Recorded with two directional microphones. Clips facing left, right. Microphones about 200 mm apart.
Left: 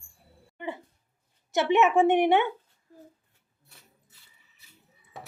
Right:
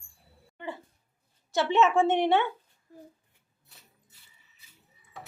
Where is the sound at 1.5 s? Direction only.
15° left (ahead or behind).